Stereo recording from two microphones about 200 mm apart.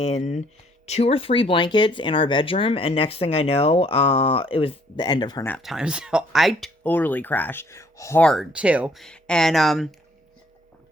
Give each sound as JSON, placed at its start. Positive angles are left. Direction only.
{"t": 0.0, "sound": "speech", "side_deg": 35}
{"t": 5.5, "sound": "speech", "side_deg": 0}
{"t": 8.2, "sound": "speech", "side_deg": 0}